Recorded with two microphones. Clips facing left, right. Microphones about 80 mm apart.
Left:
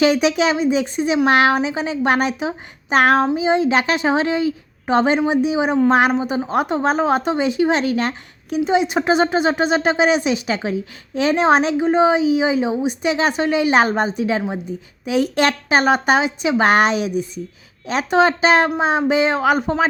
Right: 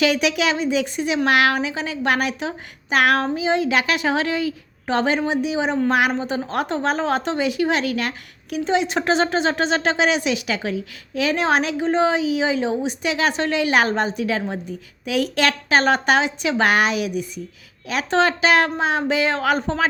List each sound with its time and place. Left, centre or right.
0.0 s speech: left
5.9 s speech: left
6.1 s a woman's voice: centre
16.7 s speech: left; by 19.9 s centre